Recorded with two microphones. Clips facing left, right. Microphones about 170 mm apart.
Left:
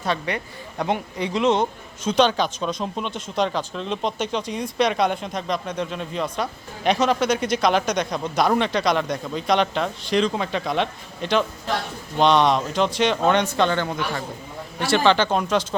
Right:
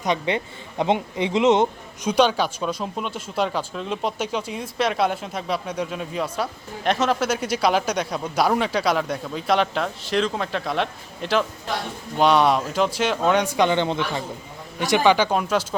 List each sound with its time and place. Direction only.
0.0 s speech: 20° right (ahead or behind)
2.0 s speech: 10° right (ahead or behind)